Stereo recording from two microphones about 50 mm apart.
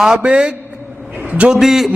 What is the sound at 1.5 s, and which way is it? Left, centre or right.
Speech, centre.